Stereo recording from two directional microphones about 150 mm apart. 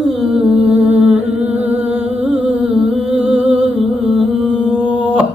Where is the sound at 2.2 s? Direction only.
5° right (ahead or behind).